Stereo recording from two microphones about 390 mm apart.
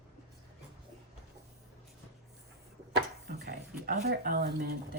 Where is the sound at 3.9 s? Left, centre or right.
Right.